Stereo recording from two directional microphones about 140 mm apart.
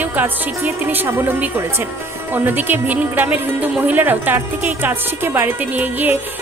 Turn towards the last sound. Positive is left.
turn(degrees=-10)  # may be behind; listen again after turning